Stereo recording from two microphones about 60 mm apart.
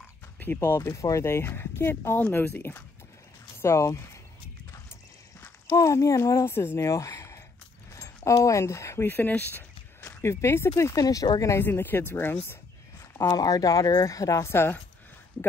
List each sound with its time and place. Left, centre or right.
0.6 s speech: left
3.5 s speech: left
5.8 s speech: left
6.8 s a sound: left
7.9 s speech: left
9.0 s a sound: left
10.2 s speech: left
11.1 s speech: left
11.7 s speech: left
13.4 s speech: left
14.5 s speech: left